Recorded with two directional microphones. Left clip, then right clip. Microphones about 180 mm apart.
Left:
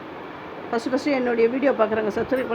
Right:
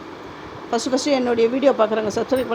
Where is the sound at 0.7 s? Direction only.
15° right (ahead or behind).